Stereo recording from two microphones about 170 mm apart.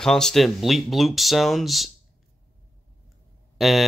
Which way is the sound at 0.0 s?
5° left (ahead or behind).